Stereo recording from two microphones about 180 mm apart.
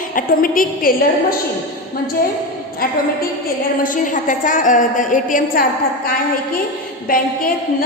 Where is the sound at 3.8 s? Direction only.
45° left (ahead or behind).